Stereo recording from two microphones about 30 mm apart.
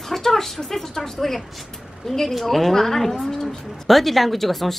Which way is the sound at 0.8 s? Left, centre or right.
Centre.